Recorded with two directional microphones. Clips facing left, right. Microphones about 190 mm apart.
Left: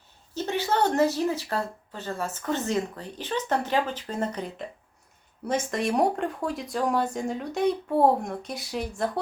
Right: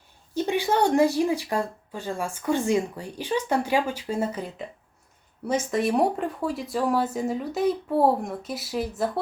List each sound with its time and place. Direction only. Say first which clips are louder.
0.3 s speech: right 3 dB; 15° right (ahead or behind)
5.7 s speech: right 2 dB; centre (ahead or behind)